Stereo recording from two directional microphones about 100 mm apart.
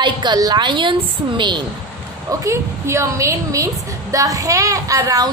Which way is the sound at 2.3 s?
30° right (ahead or behind).